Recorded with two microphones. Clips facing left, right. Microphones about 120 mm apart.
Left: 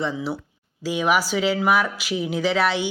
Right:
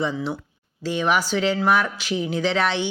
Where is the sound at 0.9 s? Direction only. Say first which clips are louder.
Even; 10° left (ahead or behind).